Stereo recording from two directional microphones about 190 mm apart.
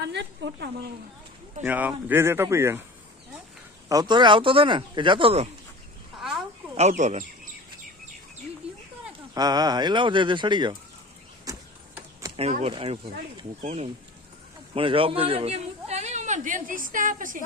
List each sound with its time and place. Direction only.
0.1 s a woman's voice: 65° right (ahead or behind)
1.6 s speech: 10° right (ahead or behind)
3.8 s speech: 20° right (ahead or behind)
6.7 s a man's voice: 40° right (ahead or behind)
9.3 s speech: 20° right (ahead or behind)
11.5 s a sound: 20° right (ahead or behind)
12.4 s a man's voice: 35° right (ahead or behind)